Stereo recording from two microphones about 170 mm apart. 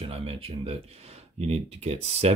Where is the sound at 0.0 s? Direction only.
35° right (ahead or behind).